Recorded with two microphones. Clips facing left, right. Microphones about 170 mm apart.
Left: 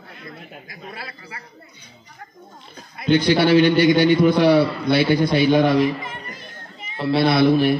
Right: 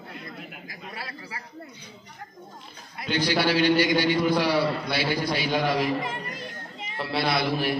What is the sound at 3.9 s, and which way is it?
Speech, 55° left (ahead or behind).